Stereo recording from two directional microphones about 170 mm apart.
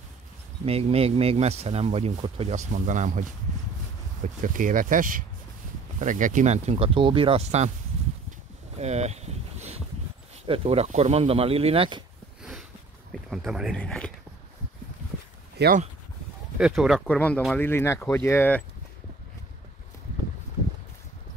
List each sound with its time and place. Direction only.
0.7 s speech: 35° right (ahead or behind)
8.7 s boat: 40° right (ahead or behind)
10.4 s speech: 30° right (ahead or behind)
13.3 s speech: centre (ahead or behind)
15.5 s speech: 70° right (ahead or behind)
16.5 s speech: 5° right (ahead or behind); by 18.6 s 15° left (ahead or behind)